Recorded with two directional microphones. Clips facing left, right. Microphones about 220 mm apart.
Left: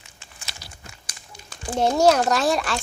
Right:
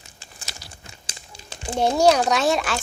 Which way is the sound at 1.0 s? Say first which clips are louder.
Right 2 dB; 25° right (ahead or behind).